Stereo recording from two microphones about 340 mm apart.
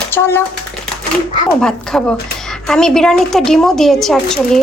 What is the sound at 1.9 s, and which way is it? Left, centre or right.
A woman's voice, centre.